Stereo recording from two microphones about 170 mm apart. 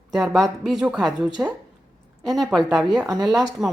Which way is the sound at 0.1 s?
Centre (ahead or behind).